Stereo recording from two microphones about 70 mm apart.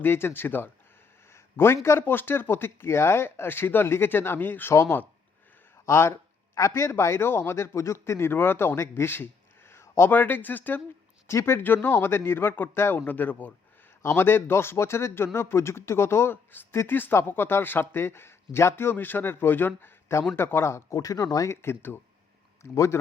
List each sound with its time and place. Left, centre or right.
0.0 s a man's voice: left
4.7 s speech: left
6.5 s a man's voice: left
11.3 s a man's voice: left
20.9 s speech: left
21.5 s a man's voice: left
22.7 s speech: left